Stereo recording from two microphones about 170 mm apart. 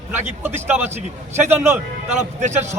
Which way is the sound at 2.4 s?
45° right (ahead or behind).